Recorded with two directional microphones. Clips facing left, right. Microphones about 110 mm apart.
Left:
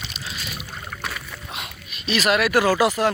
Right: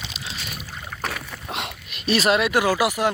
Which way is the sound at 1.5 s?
75° right (ahead or behind).